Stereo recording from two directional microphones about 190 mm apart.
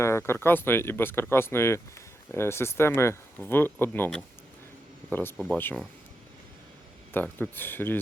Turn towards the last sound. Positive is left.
turn(degrees=10)  # may be behind; listen again after turning